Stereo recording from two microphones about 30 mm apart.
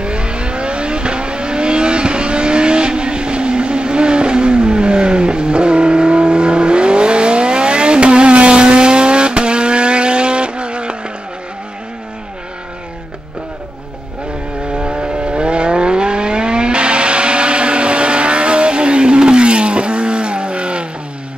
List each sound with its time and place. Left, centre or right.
0.0 s vehicle: right
14.8 s vehicle: right